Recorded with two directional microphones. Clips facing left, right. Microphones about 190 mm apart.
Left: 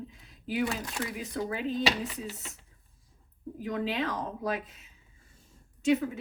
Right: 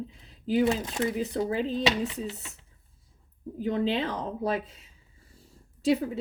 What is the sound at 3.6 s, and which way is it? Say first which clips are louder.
A woman's voice: right 4 dB; 30° right (ahead or behind).